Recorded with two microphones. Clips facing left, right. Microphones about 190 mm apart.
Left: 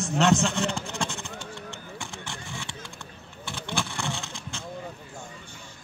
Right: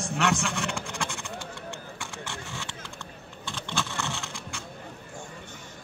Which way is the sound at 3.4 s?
10° left (ahead or behind).